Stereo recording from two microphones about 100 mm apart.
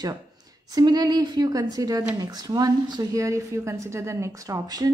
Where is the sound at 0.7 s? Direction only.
40° right (ahead or behind).